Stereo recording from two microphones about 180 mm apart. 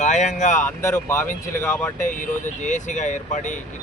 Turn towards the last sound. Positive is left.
turn(degrees=45)  # may be behind; listen again after turning